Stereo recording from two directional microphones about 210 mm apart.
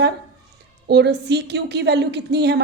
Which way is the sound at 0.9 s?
55° right (ahead or behind).